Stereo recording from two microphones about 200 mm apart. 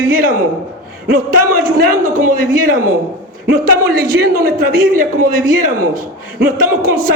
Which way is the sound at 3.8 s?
50° right (ahead or behind).